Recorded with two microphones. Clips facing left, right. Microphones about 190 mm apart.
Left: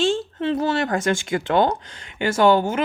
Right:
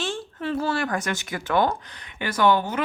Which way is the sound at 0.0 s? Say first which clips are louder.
Left 8 dB; 25° left (ahead or behind).